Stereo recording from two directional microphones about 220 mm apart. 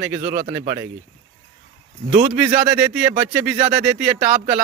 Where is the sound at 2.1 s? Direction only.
30° right (ahead or behind).